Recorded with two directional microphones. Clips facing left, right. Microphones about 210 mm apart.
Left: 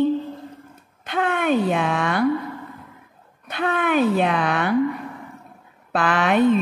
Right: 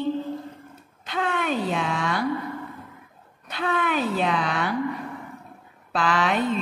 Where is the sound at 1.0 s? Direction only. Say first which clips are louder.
Left 4 dB; 55° left (ahead or behind).